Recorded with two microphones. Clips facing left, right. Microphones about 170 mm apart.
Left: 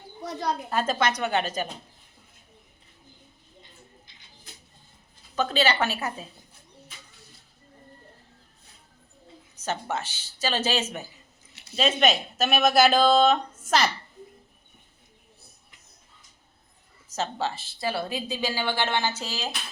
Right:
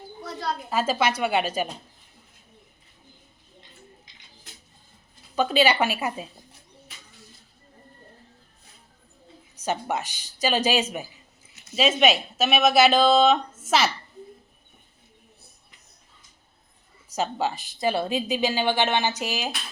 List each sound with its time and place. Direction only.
0.2 s a sound: 20° left (ahead or behind)
0.7 s a woman's voice: 5° right (ahead or behind)
5.4 s a woman's voice: 10° right (ahead or behind)
9.6 s a woman's voice: 15° right (ahead or behind)
17.1 s a woman's voice: 15° right (ahead or behind)